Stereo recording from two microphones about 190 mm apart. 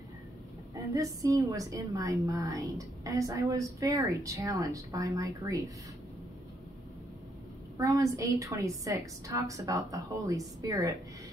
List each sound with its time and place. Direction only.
0.9 s a woman's voice: 20° right (ahead or behind)
7.7 s a woman's voice: 15° right (ahead or behind)